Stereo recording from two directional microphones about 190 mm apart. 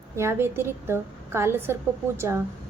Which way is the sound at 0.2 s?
15° right (ahead or behind).